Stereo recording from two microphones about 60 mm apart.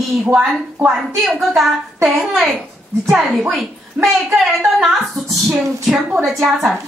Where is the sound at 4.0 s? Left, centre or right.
Right.